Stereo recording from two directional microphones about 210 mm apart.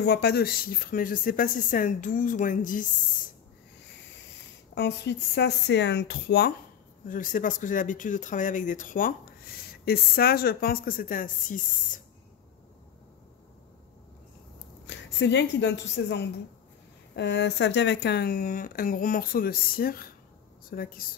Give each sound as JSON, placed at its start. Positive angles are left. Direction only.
{"t": 0.0, "sound": "speech", "side_deg": 50}
{"t": 4.7, "sound": "speech", "side_deg": 55}
{"t": 7.1, "sound": "speech", "side_deg": 40}
{"t": 14.9, "sound": "a woman's voice", "side_deg": 60}